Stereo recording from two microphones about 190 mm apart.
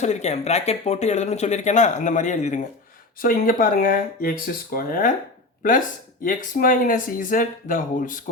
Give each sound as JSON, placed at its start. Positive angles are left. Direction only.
{"t": 0.0, "sound": "speech", "side_deg": 35}
{"t": 6.2, "sound": "speech", "side_deg": 45}